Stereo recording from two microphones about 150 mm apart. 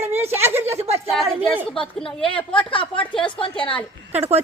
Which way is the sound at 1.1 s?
Centre (ahead or behind).